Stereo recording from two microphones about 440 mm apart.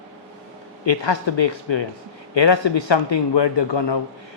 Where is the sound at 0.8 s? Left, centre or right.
Left.